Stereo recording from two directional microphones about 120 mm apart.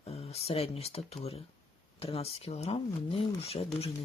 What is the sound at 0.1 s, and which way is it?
Speech, 60° left (ahead or behind).